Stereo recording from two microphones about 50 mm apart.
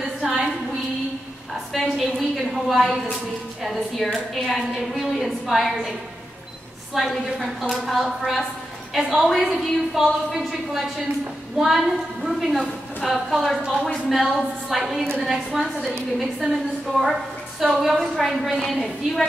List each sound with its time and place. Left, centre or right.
0.0 s a sound: centre
1.5 s a sound: centre
3.6 s a woman's voice: centre
6.9 s a woman's voice: centre
16.4 s a woman's voice: centre
17.0 s a woman's voice: centre